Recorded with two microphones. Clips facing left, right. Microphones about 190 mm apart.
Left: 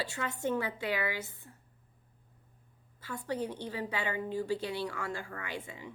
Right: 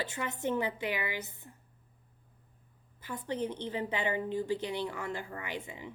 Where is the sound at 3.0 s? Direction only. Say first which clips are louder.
Even; 20° right (ahead or behind).